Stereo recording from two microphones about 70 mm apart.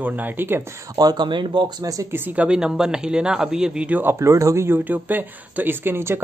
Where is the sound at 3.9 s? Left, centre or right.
Right.